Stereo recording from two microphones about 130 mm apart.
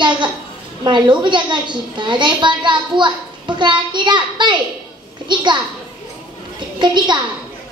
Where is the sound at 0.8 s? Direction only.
35° right (ahead or behind).